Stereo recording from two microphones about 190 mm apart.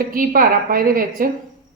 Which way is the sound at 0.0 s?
45° right (ahead or behind).